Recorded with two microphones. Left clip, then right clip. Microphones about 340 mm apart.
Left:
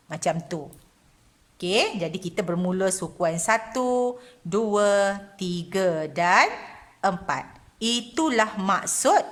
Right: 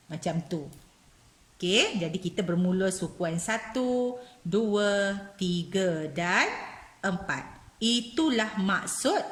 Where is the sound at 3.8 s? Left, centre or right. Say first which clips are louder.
Left 2 dB; left.